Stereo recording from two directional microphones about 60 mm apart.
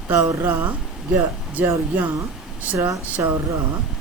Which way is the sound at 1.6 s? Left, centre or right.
Right.